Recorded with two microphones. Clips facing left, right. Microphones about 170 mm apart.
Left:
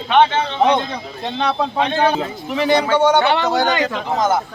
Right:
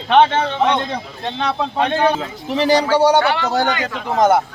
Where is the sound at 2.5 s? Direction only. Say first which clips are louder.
Right 1 dB; 35° right (ahead or behind).